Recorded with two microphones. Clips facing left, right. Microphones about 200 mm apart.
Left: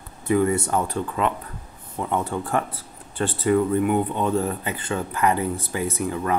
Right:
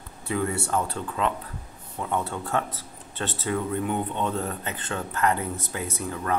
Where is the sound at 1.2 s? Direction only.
5° left (ahead or behind).